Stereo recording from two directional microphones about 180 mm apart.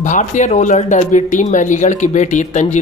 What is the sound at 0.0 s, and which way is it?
Speech, 45° left (ahead or behind).